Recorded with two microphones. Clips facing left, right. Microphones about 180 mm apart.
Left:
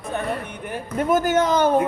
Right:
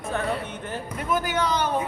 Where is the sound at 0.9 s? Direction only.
45° left (ahead or behind).